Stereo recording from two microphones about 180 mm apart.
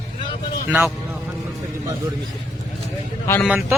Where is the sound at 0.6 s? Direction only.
10° right (ahead or behind).